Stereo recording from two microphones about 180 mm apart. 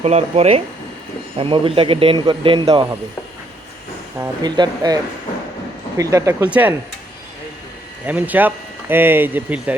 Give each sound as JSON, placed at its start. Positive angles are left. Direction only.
{"t": 0.0, "sound": "speech", "side_deg": -35}
{"t": 4.2, "sound": "speech", "side_deg": -25}
{"t": 6.0, "sound": "speech", "side_deg": -20}
{"t": 8.0, "sound": "speech", "side_deg": -10}